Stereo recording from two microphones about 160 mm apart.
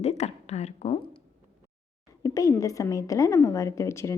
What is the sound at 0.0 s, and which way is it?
Speech, 40° left (ahead or behind).